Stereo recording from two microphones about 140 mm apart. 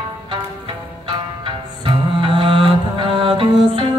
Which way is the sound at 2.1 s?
40° right (ahead or behind).